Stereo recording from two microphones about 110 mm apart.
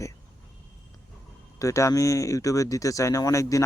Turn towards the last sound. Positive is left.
turn(degrees=30)  # may be behind; listen again after turning